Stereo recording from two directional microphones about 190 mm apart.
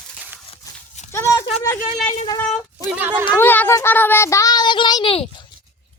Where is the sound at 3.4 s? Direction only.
10° left (ahead or behind); by 5.4 s 30° left (ahead or behind).